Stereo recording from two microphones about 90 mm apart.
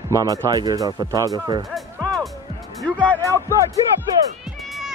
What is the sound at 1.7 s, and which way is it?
Speech, centre (ahead or behind).